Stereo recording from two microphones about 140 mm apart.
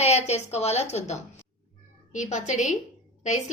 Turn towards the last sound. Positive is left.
turn(degrees=60)  # may be behind; listen again after turning